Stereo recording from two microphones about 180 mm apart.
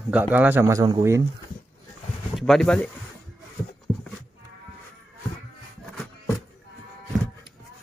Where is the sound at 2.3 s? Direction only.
Centre (ahead or behind).